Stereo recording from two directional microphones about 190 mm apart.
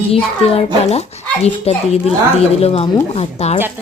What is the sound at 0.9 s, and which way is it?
A woman's voice, 35° left (ahead or behind).